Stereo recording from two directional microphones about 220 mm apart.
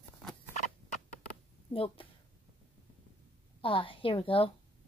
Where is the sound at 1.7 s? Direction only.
25° left (ahead or behind).